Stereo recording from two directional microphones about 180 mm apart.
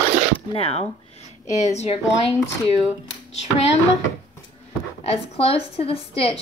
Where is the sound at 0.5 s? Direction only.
35° left (ahead or behind).